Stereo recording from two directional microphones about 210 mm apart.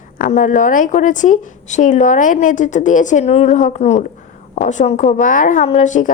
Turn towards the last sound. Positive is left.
turn(degrees=35)  # may be behind; listen again after turning